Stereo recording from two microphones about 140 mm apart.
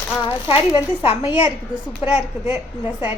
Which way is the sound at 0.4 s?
40° left (ahead or behind).